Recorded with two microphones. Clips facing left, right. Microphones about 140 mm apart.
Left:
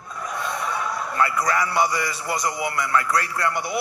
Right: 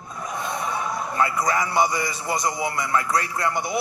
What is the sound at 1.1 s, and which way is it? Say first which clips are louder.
A man's voice: even; 20° right (ahead or behind).